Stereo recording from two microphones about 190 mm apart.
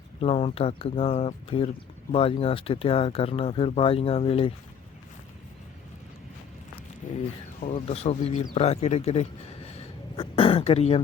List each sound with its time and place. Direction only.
0.2 s speech: 30° left (ahead or behind)
7.0 s speech: 40° left (ahead or behind)
9.6 s a sound: 30° left (ahead or behind)